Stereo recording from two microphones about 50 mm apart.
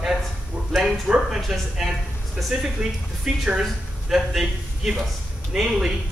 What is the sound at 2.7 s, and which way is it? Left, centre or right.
Speech, centre.